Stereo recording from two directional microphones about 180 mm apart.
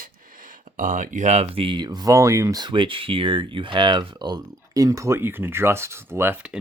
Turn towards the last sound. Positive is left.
turn(degrees=-10)  # may be behind; listen again after turning